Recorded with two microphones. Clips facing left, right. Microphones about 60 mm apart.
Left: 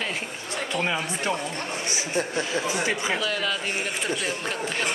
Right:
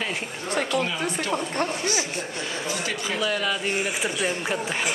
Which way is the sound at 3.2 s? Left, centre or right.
Centre.